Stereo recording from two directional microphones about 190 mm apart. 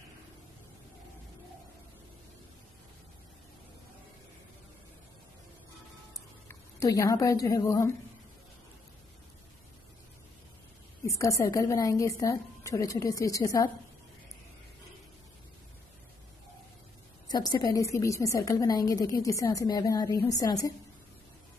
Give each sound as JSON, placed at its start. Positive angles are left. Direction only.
{"t": 6.8, "sound": "a woman's voice", "side_deg": 15}
{"t": 11.1, "sound": "a woman's voice", "side_deg": 15}
{"t": 17.3, "sound": "a woman's voice", "side_deg": 20}